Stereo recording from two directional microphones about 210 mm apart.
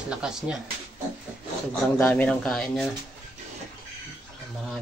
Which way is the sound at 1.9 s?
10° left (ahead or behind).